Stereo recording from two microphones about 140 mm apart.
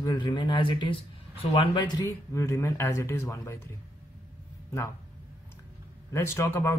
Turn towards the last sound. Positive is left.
turn(degrees=20)  # may be behind; listen again after turning